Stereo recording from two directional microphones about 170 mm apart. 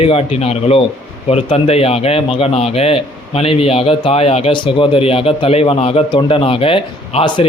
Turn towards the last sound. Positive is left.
turn(degrees=30)  # may be behind; listen again after turning